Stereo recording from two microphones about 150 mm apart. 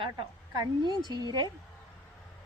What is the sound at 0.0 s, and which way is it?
A woman's voice, 30° right (ahead or behind).